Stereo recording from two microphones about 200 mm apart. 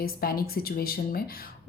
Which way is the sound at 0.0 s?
50° left (ahead or behind).